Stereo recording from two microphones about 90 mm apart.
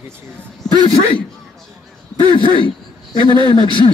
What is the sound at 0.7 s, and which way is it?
Speech, 50° right (ahead or behind).